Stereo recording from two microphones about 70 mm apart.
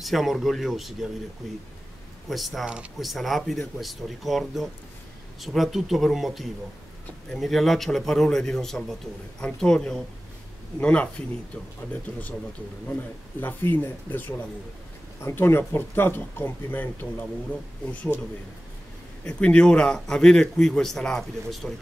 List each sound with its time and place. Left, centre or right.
0.0 s speech: centre
2.2 s speech: centre
2.6 s speech: centre
3.0 s speech: centre; by 17.3 s left
19.2 s speech: centre